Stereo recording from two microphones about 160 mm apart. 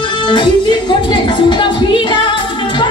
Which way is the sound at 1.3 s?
30° left (ahead or behind).